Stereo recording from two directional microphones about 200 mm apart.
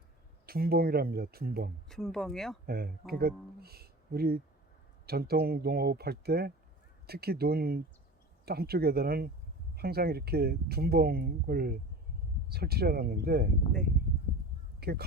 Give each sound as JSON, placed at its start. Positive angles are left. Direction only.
{"t": 0.4, "sound": "speech", "side_deg": -50}
{"t": 1.9, "sound": "speech", "side_deg": 0}
{"t": 2.6, "sound": "speech", "side_deg": -50}
{"t": 14.8, "sound": "speech", "side_deg": -50}